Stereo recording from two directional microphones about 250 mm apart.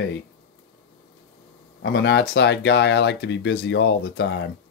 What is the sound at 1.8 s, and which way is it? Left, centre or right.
Speech, left.